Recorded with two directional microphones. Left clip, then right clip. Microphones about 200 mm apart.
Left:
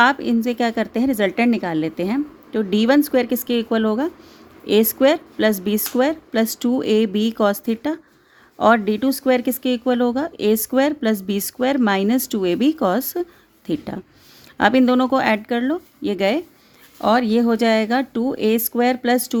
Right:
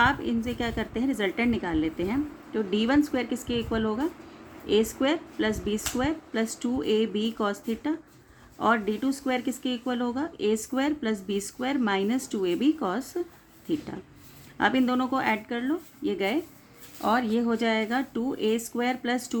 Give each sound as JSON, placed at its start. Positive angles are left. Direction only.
{"t": 0.0, "sound": "speech", "side_deg": 55}